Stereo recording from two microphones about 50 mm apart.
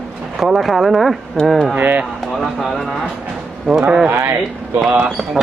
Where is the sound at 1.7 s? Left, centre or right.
Right.